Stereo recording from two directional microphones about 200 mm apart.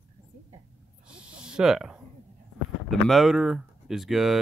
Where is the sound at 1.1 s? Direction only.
5° right (ahead or behind).